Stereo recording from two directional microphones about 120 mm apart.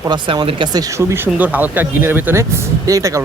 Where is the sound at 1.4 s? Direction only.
15° right (ahead or behind).